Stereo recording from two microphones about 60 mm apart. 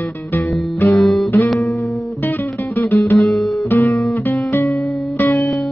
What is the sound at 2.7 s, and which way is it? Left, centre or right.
Music, left.